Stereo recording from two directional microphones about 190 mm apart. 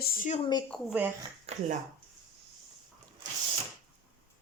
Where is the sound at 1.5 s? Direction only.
35° right (ahead or behind).